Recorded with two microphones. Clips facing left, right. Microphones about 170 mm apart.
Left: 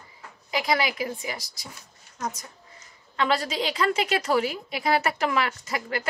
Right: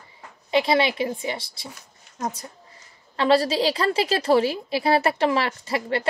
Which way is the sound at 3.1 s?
30° right (ahead or behind).